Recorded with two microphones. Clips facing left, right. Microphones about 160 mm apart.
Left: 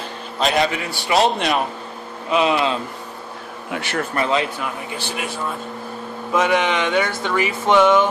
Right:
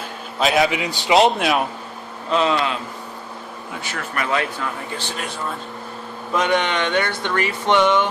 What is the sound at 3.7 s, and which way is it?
Speech, 70° left (ahead or behind).